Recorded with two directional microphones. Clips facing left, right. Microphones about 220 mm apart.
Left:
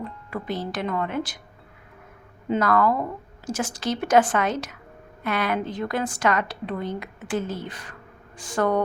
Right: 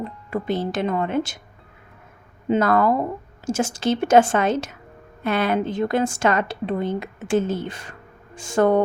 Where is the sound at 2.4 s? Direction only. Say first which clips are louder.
Right 3 dB; 25° right (ahead or behind).